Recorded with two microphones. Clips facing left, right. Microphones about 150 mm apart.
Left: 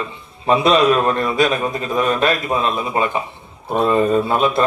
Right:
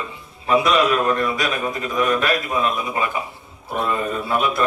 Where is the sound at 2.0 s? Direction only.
25° left (ahead or behind).